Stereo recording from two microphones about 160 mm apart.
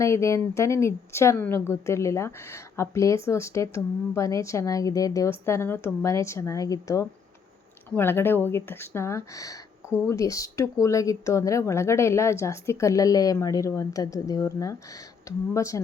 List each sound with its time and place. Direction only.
0.0 s speech: 20° left (ahead or behind)